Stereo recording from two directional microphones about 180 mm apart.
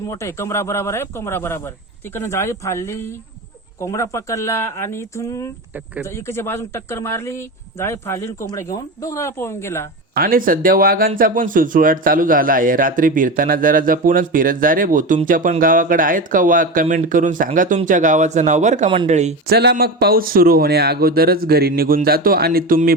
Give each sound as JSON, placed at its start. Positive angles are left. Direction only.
{"t": 0.1, "sound": "a man's voice", "side_deg": 15}
{"t": 10.2, "sound": "a man's voice", "side_deg": -50}
{"t": 19.5, "sound": "speech", "side_deg": -60}